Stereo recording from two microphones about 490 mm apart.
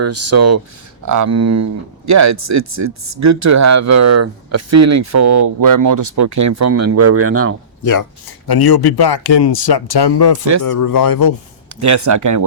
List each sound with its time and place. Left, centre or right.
0.0 s speech: right
8.4 s speech: left
11.8 s speech: right